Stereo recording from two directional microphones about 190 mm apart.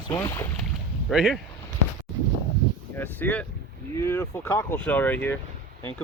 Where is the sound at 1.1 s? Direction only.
Centre (ahead or behind).